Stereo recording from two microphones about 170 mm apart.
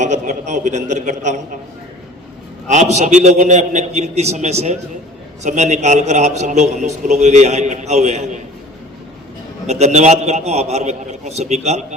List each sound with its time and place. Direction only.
0.0 s a man's voice: 45° right (ahead or behind)
2.6 s a man's voice: 45° right (ahead or behind)
9.6 s a man's voice: 40° right (ahead or behind)